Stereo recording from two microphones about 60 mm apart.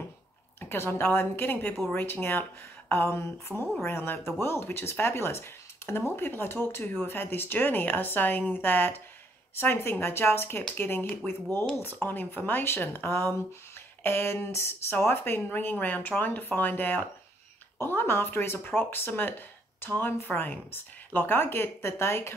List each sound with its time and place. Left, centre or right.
0.6 s speech: left